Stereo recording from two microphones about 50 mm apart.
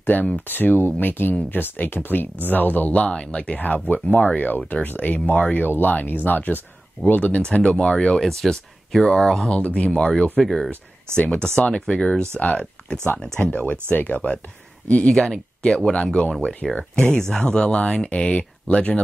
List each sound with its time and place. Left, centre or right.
0.0 s speech: left
5.2 s speech: left
7.4 s speech: centre
8.2 s speech: centre
9.6 s speech: left
9.8 s speech: centre
10.4 s speech: centre
11.1 s speech: left
12.4 s speech: left
15.0 s speech: centre; by 18.9 s left